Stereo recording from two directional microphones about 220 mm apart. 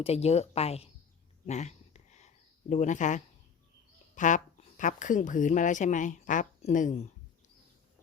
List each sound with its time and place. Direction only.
0.0 s speech: 30° left (ahead or behind)
1.5 s a sound: 30° left (ahead or behind)
4.1 s speech: 35° left (ahead or behind)